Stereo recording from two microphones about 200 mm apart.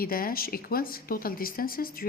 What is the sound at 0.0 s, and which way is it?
Speech, 45° left (ahead or behind).